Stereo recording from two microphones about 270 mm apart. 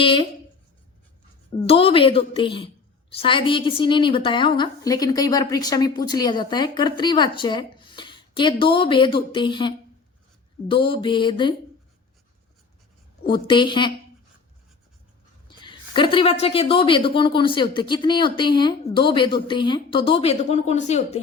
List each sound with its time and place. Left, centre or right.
0.0 s a woman's voice: centre
1.6 s a woman's voice: centre
13.2 s a woman's voice: centre
15.4 s a woman's voice: centre